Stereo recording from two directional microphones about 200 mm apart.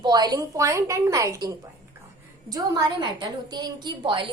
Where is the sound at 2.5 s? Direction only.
20° right (ahead or behind).